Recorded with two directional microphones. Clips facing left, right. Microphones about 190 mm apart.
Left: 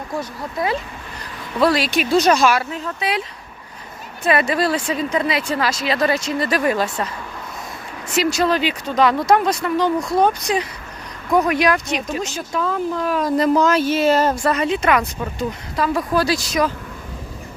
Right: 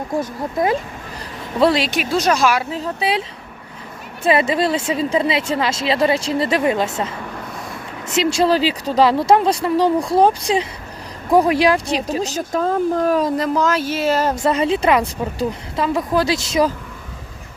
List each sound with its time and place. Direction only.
0.2 s speech: 45° right (ahead or behind)
1.5 s speech: 25° right (ahead or behind)
2.0 s speech: centre (ahead or behind)
2.7 s speech: 30° right (ahead or behind)
13.4 s speech: 5° right (ahead or behind)
14.3 s speech: 25° right (ahead or behind)